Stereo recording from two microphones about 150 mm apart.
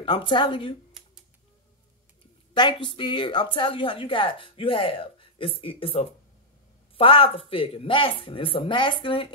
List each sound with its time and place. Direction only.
0.0 s a woman's voice: 35° left (ahead or behind)
2.5 s a woman's voice: 30° left (ahead or behind)